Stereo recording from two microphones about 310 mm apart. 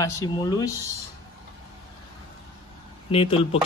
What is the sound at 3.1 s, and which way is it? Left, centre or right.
Speech, centre.